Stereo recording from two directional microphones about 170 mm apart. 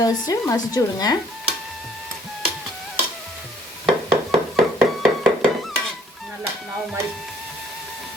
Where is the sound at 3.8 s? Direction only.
Centre (ahead or behind).